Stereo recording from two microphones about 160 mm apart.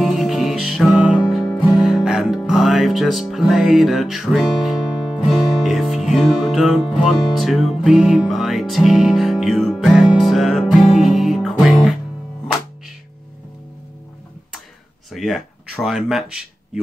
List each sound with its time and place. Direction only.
0.0 s music: centre (ahead or behind)
15.0 s speech: centre (ahead or behind)